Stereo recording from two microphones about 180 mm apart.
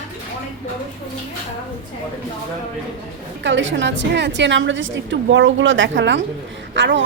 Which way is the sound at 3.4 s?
90° right.